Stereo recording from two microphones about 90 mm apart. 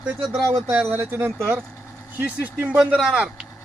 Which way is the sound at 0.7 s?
25° right (ahead or behind).